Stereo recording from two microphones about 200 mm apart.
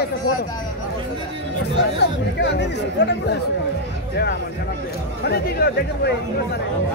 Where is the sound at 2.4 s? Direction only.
60° left (ahead or behind).